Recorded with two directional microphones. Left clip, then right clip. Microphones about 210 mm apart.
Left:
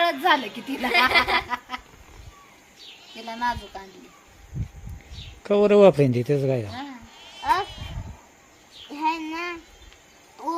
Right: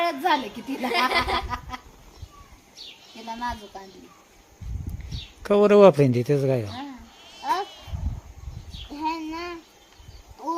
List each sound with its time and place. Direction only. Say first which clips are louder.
0.0 s a woman's voice: left 2 dB; centre (ahead or behind)
1.1 s a sound: left 4 dB; 10° left (ahead or behind)
3.2 s speech: left 4 dB; 5° right (ahead or behind)
5.4 s speech: right 1 dB; 5° right (ahead or behind)
7.2 s a sound: left 3 dB; 15° right (ahead or behind)
8.9 s child singing: left 3 dB; 20° right (ahead or behind)